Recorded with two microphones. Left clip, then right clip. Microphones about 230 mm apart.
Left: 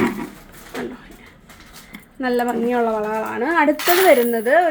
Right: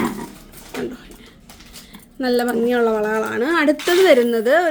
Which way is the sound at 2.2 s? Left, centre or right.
Right.